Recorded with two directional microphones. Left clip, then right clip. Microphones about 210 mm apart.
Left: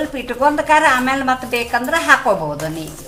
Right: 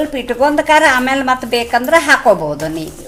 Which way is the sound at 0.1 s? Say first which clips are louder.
Right 3 dB; 35° right (ahead or behind).